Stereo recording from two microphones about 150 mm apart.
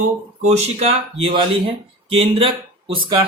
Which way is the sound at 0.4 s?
45° right (ahead or behind).